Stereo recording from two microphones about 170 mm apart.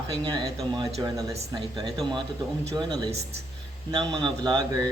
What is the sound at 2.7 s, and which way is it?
A man's voice, 25° right (ahead or behind).